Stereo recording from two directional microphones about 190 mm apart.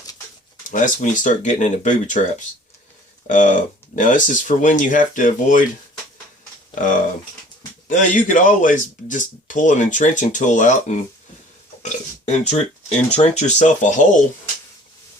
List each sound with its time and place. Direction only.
0.7 s speech: 40° left (ahead or behind)
3.2 s speech: 40° left (ahead or behind)
6.7 s speech: 45° left (ahead or behind)
11.8 s burping: 35° left (ahead or behind)
13.1 s speech: 35° left (ahead or behind)